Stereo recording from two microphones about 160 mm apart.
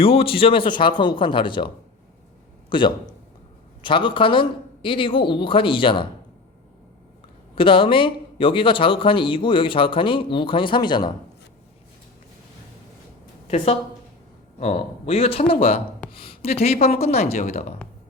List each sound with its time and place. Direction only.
0.0 s a man's voice: 35° left (ahead or behind)
7.5 s speech: 35° left (ahead or behind)
14.6 s speech: 40° left (ahead or behind)
16.7 s speech: 65° left (ahead or behind)
17.0 s speech: 40° left (ahead or behind)